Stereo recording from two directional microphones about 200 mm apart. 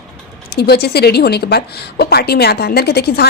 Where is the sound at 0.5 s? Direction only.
55° left (ahead or behind).